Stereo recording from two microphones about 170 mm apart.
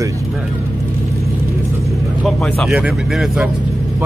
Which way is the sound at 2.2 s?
Centre (ahead or behind).